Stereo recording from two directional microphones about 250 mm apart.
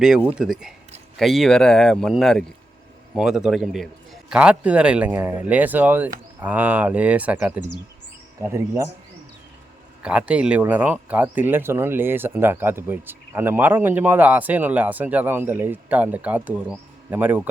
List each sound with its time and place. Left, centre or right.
0.0 s a man's voice: centre
10.0 s speech: centre